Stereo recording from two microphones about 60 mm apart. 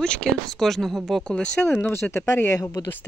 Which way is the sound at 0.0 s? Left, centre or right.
Centre.